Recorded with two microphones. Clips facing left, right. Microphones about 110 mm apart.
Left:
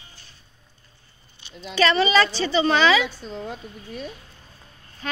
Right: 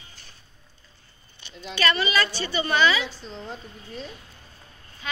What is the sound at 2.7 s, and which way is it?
Speech, 90° left.